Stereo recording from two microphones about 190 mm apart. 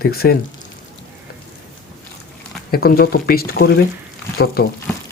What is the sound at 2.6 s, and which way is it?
Speech, 50° left (ahead or behind).